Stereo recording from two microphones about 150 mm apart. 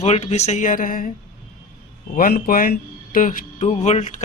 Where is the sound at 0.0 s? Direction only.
45° left (ahead or behind); by 1.1 s 70° left (ahead or behind).